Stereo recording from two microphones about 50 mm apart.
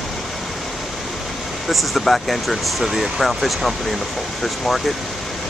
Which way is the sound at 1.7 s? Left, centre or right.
Centre.